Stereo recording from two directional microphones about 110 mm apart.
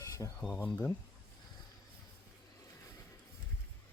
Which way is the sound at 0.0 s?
30° left (ahead or behind).